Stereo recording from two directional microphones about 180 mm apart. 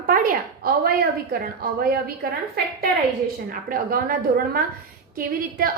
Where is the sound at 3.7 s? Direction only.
50° right (ahead or behind).